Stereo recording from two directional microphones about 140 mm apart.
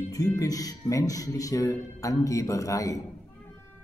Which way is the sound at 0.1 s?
25° left (ahead or behind).